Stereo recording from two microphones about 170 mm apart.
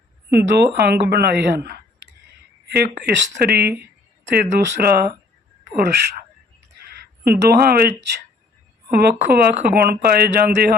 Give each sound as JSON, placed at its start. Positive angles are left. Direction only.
{"t": 0.3, "sound": "speech", "side_deg": -70}
{"t": 6.7, "sound": "a sound", "side_deg": -65}
{"t": 8.9, "sound": "speech", "side_deg": -70}